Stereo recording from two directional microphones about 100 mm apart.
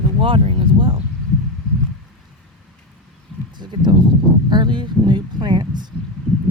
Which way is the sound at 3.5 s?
50° right (ahead or behind).